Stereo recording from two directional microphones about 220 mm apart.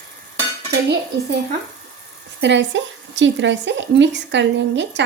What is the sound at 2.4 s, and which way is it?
Speech, 55° right (ahead or behind).